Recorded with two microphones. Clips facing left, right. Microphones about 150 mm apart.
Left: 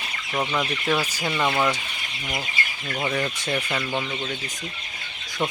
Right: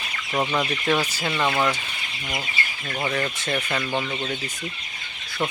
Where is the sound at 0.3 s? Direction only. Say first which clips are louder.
Right 2 dB; 10° right (ahead or behind).